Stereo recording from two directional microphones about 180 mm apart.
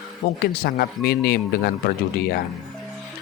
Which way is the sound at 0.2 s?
65° left (ahead or behind).